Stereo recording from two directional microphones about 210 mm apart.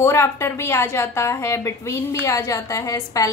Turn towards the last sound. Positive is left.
turn(degrees=15)  # may be behind; listen again after turning